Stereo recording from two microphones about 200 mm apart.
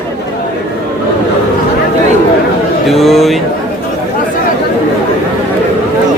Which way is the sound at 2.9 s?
Centre (ahead or behind).